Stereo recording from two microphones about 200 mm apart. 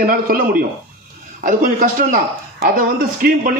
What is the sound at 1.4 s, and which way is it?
Speech, 45° right (ahead or behind).